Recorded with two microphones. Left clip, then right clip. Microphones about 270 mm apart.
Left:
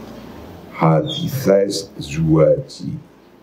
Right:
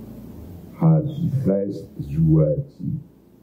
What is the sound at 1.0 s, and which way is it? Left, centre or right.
Speech, left.